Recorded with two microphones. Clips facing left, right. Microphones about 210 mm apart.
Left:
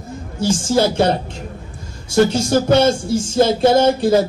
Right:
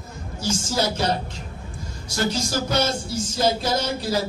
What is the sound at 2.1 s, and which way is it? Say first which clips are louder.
A man's voice: left 11 dB; 50° left (ahead or behind).